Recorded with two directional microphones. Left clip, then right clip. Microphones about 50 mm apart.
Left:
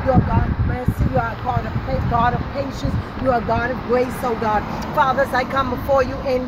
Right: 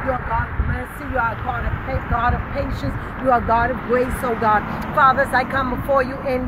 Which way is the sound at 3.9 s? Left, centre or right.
Left.